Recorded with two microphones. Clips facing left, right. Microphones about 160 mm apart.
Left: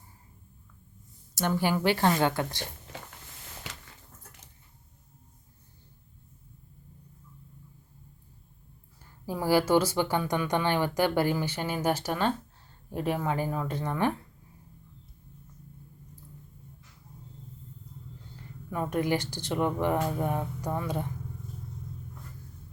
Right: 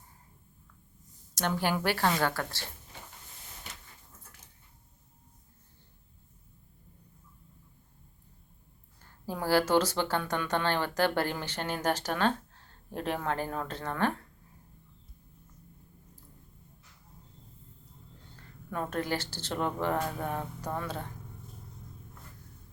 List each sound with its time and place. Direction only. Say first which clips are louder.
1.8 s speech: left 5 dB; 20° left (ahead or behind)
9.2 s speech: left 2 dB; 10° left (ahead or behind)
18.3 s speech: left 2 dB; 10° left (ahead or behind)